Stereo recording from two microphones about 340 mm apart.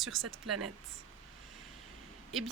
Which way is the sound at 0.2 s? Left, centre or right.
Right.